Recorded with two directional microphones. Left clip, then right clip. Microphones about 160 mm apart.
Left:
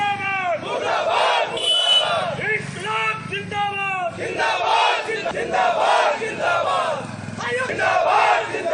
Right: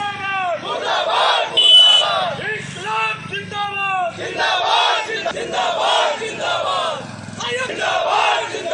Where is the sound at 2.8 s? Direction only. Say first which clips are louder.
Right 5 dB; 20° left (ahead or behind).